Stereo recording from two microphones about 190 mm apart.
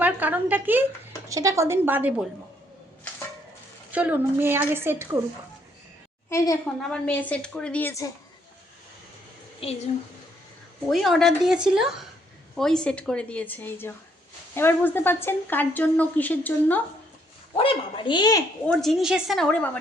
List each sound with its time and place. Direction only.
0.0 s a woman's voice: 10° right (ahead or behind)
3.9 s a woman's voice: 10° right (ahead or behind)
6.3 s a woman's voice: 15° left (ahead or behind)
6.8 s a woman's voice: 5° left (ahead or behind)
9.6 s a woman's voice: 30° left (ahead or behind)
10.8 s a woman's voice: centre (ahead or behind)
17.6 s speech: 25° left (ahead or behind)
18.7 s a woman's voice: centre (ahead or behind)